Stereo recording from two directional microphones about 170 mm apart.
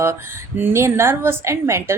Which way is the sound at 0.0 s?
15° right (ahead or behind).